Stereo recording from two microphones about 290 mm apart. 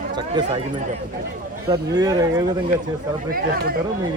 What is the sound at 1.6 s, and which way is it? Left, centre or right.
Speech, centre.